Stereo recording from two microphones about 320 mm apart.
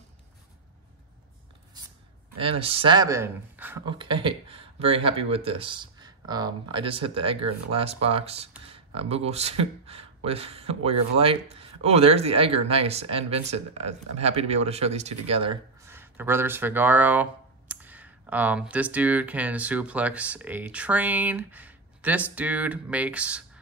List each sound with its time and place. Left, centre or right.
2.3 s speech: centre